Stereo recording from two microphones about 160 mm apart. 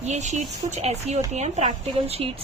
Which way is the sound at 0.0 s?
45° right (ahead or behind).